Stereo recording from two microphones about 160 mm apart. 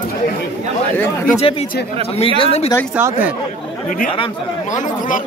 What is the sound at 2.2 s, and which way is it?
Speech, 35° left (ahead or behind).